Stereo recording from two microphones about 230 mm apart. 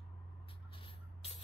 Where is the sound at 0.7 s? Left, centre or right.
Left.